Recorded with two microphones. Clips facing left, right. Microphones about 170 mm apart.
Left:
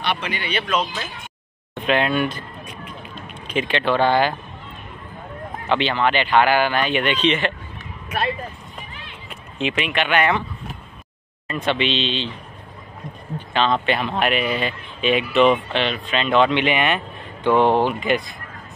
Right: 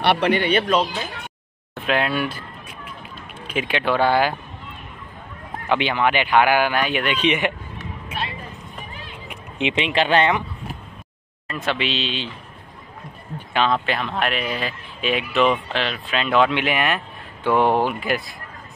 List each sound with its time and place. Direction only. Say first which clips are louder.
0.0 s speech: right 8 dB; 65° right (ahead or behind)
1.8 s speech: left 2 dB; 5° right (ahead or behind)
5.7 s speech: even; 10° right (ahead or behind)
8.1 s speech: left 5 dB; 25° right (ahead or behind)
9.3 s speech: right 1 dB; 20° right (ahead or behind)
11.4 s speech: left 3 dB; centre (ahead or behind)
13.5 s speech: even; 10° right (ahead or behind)
13.7 s speech: left 2 dB; centre (ahead or behind)